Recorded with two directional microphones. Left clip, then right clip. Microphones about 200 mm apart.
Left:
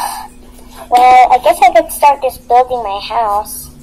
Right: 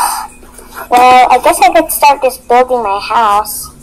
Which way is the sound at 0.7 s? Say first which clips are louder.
Right 1 dB; 45° right (ahead or behind).